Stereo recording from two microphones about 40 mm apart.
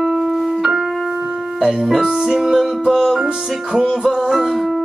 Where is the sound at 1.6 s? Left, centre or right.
Centre.